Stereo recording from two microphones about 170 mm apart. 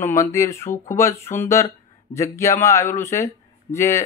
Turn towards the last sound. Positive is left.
turn(degrees=15)  # may be behind; listen again after turning